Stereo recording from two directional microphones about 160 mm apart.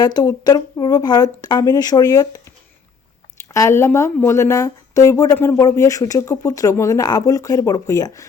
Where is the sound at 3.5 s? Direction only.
20° left (ahead or behind).